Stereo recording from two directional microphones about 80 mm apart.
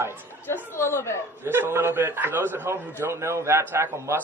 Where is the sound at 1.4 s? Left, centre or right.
Right.